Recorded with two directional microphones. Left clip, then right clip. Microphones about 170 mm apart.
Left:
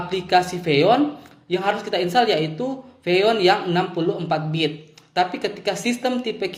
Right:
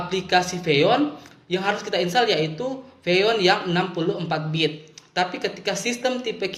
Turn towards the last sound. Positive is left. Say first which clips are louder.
# left 1 dB
turn(degrees=50)  # may be behind; listen again after turning